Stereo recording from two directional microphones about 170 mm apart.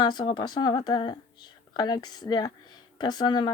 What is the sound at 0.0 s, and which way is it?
Speech, 25° left (ahead or behind).